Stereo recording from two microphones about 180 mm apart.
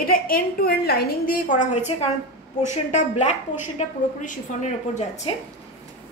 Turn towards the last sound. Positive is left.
turn(degrees=40)  # may be behind; listen again after turning